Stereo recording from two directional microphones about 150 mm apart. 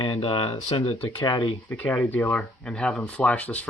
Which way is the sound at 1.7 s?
10° left (ahead or behind).